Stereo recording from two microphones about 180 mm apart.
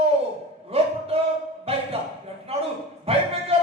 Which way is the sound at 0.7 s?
35° right (ahead or behind).